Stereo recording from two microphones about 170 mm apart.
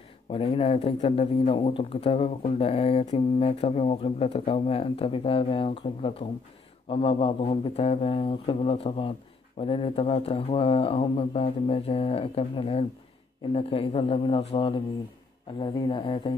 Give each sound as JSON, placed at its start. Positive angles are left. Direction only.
{"t": 0.3, "sound": "speech", "side_deg": 35}